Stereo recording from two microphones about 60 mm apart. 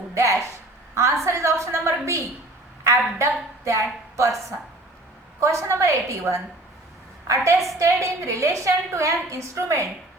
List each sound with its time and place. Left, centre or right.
0.1 s a woman's voice: right